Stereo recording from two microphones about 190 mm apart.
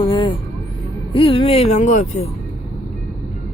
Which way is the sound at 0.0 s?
25° left (ahead or behind).